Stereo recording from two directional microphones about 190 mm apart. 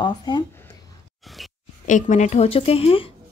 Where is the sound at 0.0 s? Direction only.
20° left (ahead or behind).